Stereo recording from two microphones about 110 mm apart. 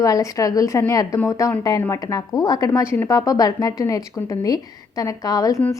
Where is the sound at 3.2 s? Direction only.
35° left (ahead or behind).